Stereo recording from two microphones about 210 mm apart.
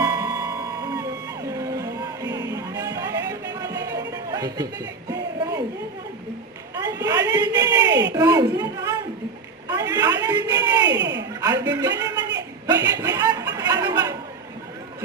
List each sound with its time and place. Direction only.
0.0 s music: 15° right (ahead or behind)
6.7 s a sound: 20° right (ahead or behind)
7.9 s speech: 55° right (ahead or behind)
8.1 s a woman's voice: 15° right (ahead or behind)
9.6 s a sound: 15° right (ahead or behind)
10.8 s speech: 55° right (ahead or behind)
11.3 s speech: 15° right (ahead or behind)
13.6 s chatter: 15° right (ahead or behind)